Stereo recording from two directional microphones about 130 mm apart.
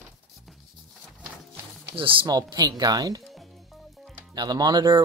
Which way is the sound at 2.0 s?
40° right (ahead or behind).